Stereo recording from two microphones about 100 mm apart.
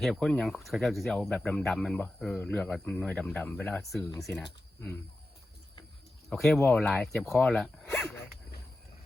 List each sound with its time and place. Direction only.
0.0 s speech: 5° left (ahead or behind)
2.4 s speech: 15° left (ahead or behind)
2.6 s speech: 5° left (ahead or behind)
6.3 s speech: centre (ahead or behind)